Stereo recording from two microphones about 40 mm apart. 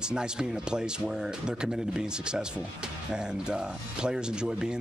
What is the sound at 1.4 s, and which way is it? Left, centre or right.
Speech, centre.